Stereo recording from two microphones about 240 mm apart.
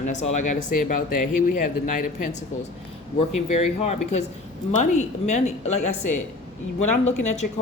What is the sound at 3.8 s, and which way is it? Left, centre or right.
Speech, left.